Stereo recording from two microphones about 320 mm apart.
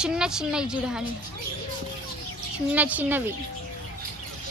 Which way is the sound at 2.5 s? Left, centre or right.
Centre.